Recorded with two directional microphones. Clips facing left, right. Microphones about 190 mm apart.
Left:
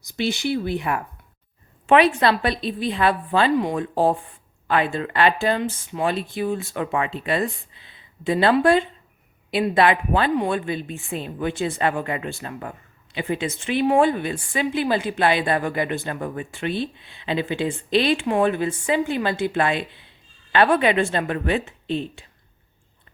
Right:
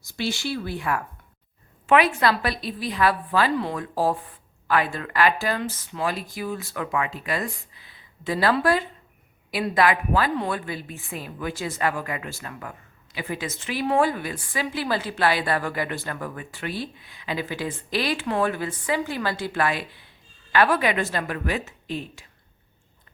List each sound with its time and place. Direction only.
0.0 s a woman's voice: 20° left (ahead or behind)
3.8 s a woman's voice: 25° left (ahead or behind)